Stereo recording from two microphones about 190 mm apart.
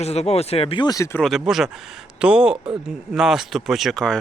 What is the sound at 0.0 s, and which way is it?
Speech, 35° left (ahead or behind).